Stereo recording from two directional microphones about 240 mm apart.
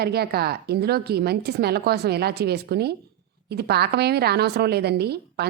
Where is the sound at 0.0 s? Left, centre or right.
Right.